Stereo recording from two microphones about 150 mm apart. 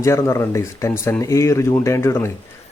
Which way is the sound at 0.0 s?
20° left (ahead or behind).